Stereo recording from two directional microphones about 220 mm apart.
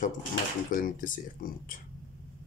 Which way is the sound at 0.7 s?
35° left (ahead or behind).